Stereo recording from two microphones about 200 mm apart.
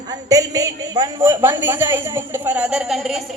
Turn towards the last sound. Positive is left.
turn(degrees=0)  # may be behind; listen again after turning